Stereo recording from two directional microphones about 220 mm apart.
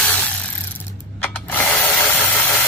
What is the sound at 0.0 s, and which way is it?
Tools, 5° left (ahead or behind).